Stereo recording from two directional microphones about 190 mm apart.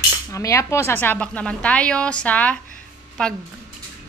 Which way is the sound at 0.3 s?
15° left (ahead or behind).